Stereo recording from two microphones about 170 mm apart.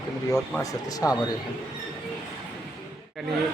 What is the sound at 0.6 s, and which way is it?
Speech, 20° left (ahead or behind).